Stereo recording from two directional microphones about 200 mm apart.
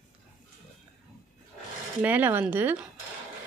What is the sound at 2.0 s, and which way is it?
Speech, 10° right (ahead or behind).